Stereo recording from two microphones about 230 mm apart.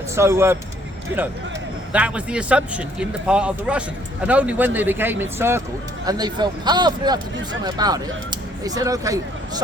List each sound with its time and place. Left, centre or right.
0.2 s speech: centre
1.9 s a man's voice: centre